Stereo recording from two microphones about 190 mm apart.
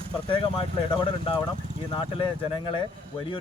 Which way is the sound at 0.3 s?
25° left (ahead or behind).